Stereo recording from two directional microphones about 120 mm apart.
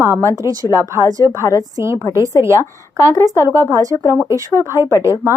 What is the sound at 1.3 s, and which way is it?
Speech, 25° left (ahead or behind).